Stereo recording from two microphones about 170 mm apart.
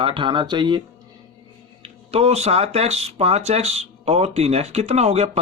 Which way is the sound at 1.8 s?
35° right (ahead or behind).